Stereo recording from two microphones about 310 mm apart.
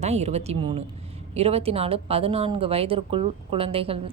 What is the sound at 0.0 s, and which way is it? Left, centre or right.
A woman's voice, right.